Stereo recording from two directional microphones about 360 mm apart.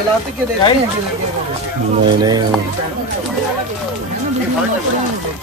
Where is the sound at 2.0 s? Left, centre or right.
Centre.